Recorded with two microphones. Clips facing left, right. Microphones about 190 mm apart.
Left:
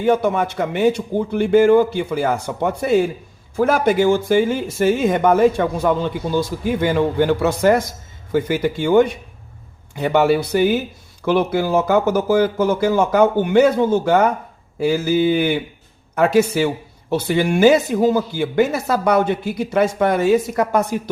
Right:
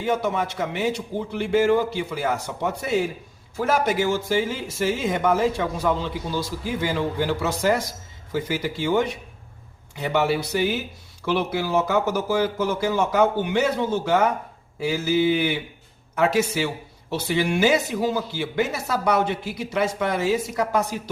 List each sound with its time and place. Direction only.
0.0 s speech: 55° left (ahead or behind)